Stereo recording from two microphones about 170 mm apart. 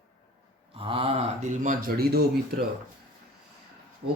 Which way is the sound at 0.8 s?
30° right (ahead or behind).